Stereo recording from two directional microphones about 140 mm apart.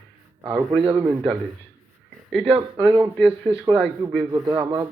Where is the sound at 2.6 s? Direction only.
35° right (ahead or behind).